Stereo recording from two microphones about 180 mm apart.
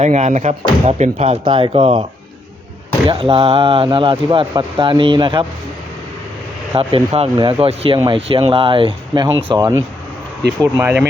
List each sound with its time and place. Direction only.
0.0 s speech: 40° right (ahead or behind)
1.5 s speech: 25° right (ahead or behind)
3.1 s speech: 30° right (ahead or behind)
6.7 s speech: 35° right (ahead or behind)
10.6 s speech: 10° right (ahead or behind)